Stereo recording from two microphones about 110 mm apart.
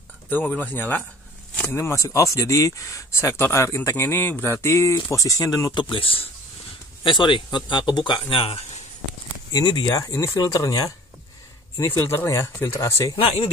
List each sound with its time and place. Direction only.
0.3 s speech: 15° left (ahead or behind); by 5.7 s 30° left (ahead or behind)
5.8 s speech: 50° left (ahead or behind)
8.1 s speech: 60° left (ahead or behind)
9.5 s speech: 40° left (ahead or behind)